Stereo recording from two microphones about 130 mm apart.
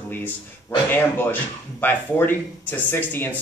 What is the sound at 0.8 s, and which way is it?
Speech, 15° left (ahead or behind).